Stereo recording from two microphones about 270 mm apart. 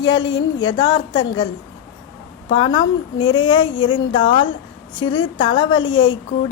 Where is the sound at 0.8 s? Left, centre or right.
Centre.